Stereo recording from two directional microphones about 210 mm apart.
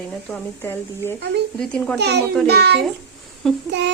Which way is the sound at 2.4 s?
50° right (ahead or behind).